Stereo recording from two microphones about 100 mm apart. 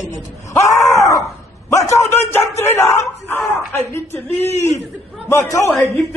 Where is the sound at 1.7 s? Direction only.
30° left (ahead or behind).